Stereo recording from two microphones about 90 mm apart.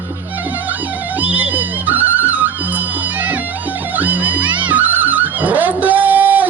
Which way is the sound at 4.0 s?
20° right (ahead or behind).